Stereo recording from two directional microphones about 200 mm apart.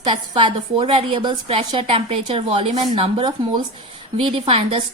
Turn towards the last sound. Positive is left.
turn(degrees=-30)  # may be behind; listen again after turning